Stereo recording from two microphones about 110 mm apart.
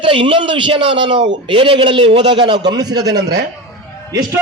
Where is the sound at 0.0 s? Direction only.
50° right (ahead or behind); by 3.2 s 35° right (ahead or behind).